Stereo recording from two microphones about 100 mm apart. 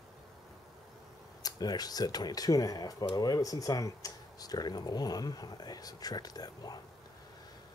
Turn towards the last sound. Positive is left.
turn(degrees=40)  # may be behind; listen again after turning